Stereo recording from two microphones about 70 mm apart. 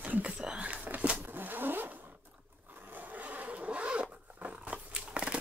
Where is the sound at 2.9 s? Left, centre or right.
Right.